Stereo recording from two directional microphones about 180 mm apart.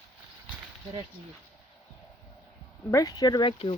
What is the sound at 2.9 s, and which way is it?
Speech, 20° left (ahead or behind).